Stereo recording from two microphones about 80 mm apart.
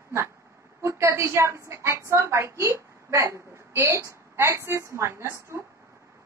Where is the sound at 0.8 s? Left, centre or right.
Right.